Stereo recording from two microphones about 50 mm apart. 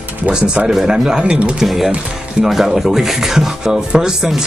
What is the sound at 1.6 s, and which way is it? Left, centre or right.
Speech, centre.